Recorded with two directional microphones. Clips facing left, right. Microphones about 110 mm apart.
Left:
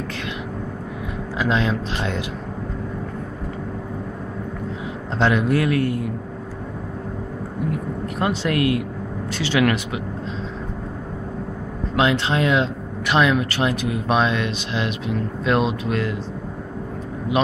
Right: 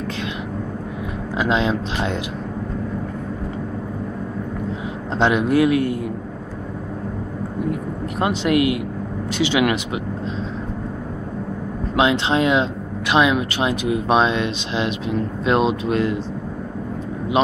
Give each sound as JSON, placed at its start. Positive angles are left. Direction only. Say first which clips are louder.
{"t": 1.4, "sound": "speech", "louder": "right 2 dB", "side_deg": -20}
{"t": 5.1, "sound": "speech", "louder": "right 2 dB", "side_deg": -20}
{"t": 8.2, "sound": "speech", "louder": "right 3 dB", "side_deg": -20}
{"t": 11.9, "sound": "speech", "louder": "right 2 dB", "side_deg": -20}